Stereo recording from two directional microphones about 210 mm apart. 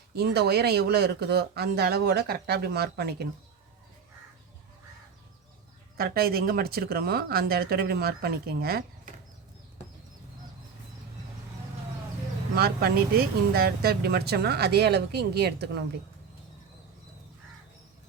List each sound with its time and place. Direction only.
0.1 s speech: 50° right (ahead or behind)
6.0 s speech: 45° right (ahead or behind)
12.5 s speech: 45° right (ahead or behind)